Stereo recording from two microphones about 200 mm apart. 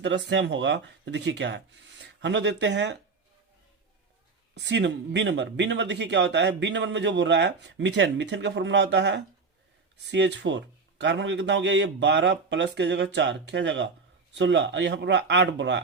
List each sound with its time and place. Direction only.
0.0 s speech: 60° right (ahead or behind)
4.5 s speech: 60° right (ahead or behind)